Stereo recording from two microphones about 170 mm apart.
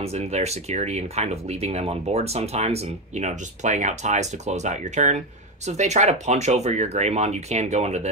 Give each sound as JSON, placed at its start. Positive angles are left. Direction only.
{"t": 0.0, "sound": "speech", "side_deg": -35}